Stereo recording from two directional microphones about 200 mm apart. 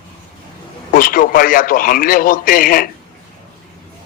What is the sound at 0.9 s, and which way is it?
A man's voice, 45° left (ahead or behind).